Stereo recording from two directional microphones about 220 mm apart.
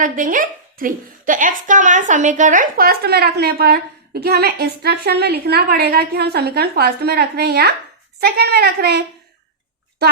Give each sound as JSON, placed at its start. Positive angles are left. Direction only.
{"t": 0.0, "sound": "a woman's voice", "side_deg": -35}